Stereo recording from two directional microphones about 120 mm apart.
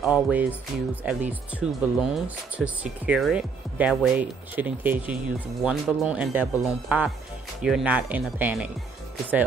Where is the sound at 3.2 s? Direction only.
10° right (ahead or behind).